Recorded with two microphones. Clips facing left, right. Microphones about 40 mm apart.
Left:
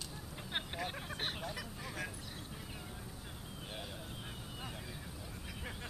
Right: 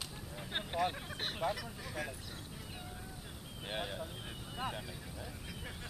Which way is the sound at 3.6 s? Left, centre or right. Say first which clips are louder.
Right 8 dB; right.